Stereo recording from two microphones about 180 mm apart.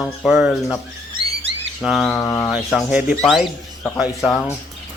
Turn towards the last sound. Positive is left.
turn(degrees=5)  # may be behind; listen again after turning